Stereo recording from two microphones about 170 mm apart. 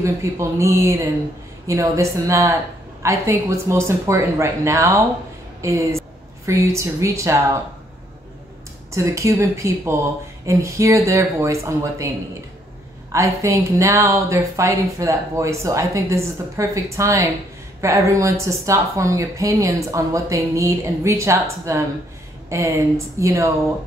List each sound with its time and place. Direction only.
0.0 s a woman's voice: 15° right (ahead or behind)
8.9 s a woman's voice: 15° right (ahead or behind)
13.1 s a woman's voice: 15° right (ahead or behind)